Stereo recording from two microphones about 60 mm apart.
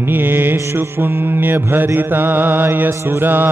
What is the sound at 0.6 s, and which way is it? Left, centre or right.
Mantra, right.